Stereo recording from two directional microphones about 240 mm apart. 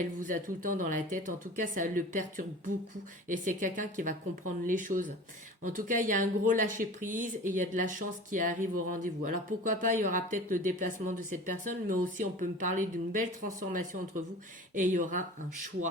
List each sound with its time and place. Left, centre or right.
0.0 s speech: right